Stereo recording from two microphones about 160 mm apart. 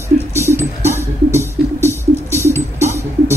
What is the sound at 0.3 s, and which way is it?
Music, 15° right (ahead or behind).